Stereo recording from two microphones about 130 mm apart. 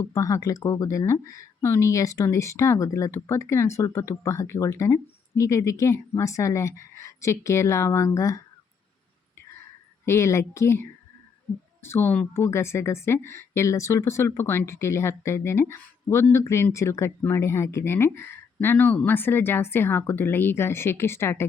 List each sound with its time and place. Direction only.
0.0 s a woman's voice: 25° left (ahead or behind)
10.1 s a woman's voice: 20° left (ahead or behind)